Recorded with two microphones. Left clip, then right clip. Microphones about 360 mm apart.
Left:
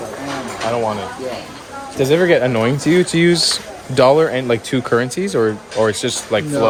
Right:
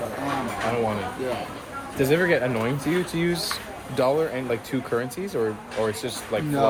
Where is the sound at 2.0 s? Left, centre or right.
Centre.